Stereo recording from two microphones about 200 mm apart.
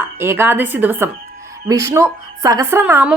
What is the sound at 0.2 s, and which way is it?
A woman's voice, 10° right (ahead or behind).